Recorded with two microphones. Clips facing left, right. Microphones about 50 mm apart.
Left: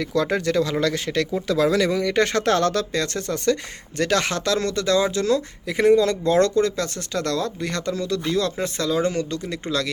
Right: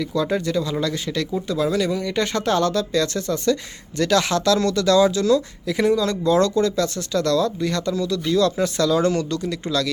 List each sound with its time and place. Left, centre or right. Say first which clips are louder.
0.0 s speech: even; left
1.5 s speech: left 2 dB; left